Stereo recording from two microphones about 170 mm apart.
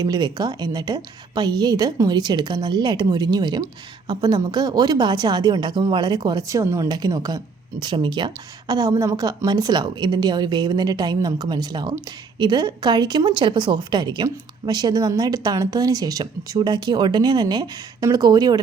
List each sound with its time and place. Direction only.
0.0 s a woman's voice: 25° right (ahead or behind)